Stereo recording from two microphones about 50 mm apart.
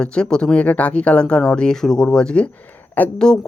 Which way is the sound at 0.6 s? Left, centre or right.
Left.